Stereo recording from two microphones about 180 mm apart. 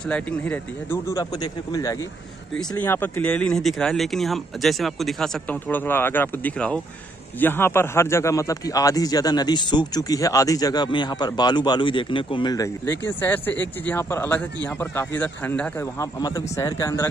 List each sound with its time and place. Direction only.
0.0 s speech: 5° left (ahead or behind)
16.0 s speech: 20° left (ahead or behind)